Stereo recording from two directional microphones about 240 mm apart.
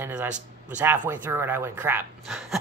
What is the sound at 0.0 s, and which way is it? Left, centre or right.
Speech, centre.